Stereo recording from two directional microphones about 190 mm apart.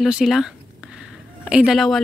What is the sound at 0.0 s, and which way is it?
Speech, centre (ahead or behind).